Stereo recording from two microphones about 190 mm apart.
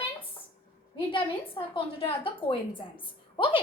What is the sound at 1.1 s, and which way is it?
A woman's voice, 25° left (ahead or behind).